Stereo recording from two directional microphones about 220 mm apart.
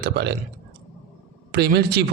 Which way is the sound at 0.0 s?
45° right (ahead or behind).